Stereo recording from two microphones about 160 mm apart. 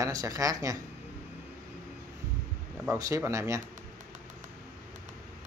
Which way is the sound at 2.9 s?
20° right (ahead or behind).